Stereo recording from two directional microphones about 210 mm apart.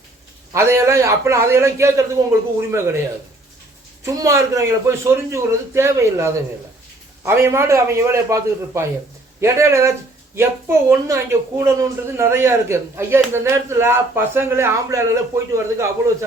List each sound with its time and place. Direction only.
0.5 s a woman's voice: 15° right (ahead or behind)
4.0 s a woman's voice: 15° right (ahead or behind)